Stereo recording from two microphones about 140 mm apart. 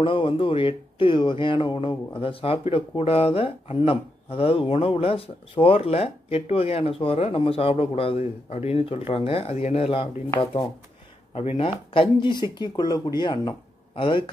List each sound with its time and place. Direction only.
0.0 s speech: 40° left (ahead or behind)